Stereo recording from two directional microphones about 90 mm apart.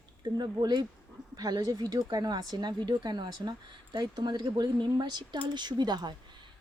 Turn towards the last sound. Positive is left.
turn(degrees=-50)  # may be behind; listen again after turning